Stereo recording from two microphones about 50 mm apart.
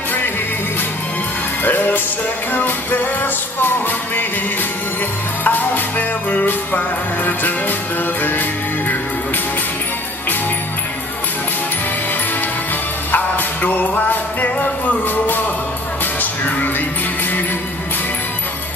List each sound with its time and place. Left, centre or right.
1.6 s music: left
5.4 s music: left
13.1 s music: left